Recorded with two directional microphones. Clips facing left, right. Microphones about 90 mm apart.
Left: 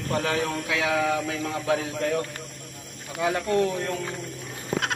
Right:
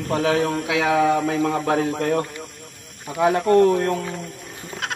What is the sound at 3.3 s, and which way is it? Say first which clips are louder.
Mantra: right 9 dB; 55° right (ahead or behind).